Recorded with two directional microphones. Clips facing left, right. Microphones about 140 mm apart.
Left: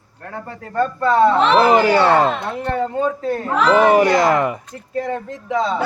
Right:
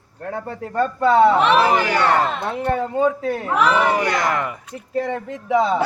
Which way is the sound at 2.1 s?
25° left (ahead or behind).